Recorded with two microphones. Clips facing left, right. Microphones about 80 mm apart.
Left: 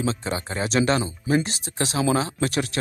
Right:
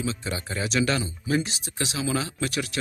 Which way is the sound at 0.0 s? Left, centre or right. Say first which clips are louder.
Left 4 dB; left.